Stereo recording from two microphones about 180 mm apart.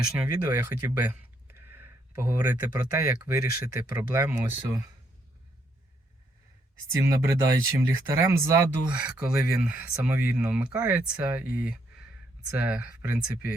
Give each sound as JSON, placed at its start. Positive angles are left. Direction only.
{"t": 0.1, "sound": "speech", "side_deg": -10}
{"t": 6.9, "sound": "speech", "side_deg": -15}